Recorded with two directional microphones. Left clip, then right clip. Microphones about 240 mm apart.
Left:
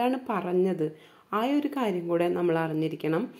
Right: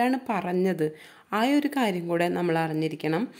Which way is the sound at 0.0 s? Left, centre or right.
Right.